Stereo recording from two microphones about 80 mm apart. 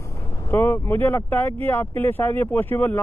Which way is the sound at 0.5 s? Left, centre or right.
Left.